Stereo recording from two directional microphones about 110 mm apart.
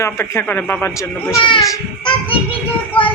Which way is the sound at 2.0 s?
55° left (ahead or behind).